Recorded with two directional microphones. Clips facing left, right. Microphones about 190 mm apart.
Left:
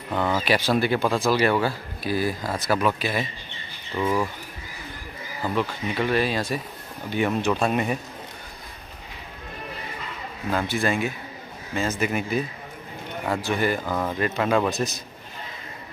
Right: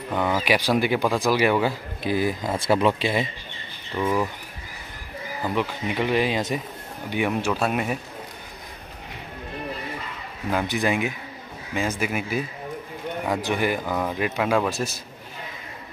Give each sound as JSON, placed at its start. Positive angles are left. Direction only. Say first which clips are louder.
{"t": 0.1, "sound": "speech", "louder": "even", "side_deg": -10}
{"t": 3.9, "sound": "speech", "louder": "even", "side_deg": 0}
{"t": 5.4, "sound": "speech", "louder": "even", "side_deg": -15}
{"t": 10.5, "sound": "speech", "louder": "right 1 dB", "side_deg": -15}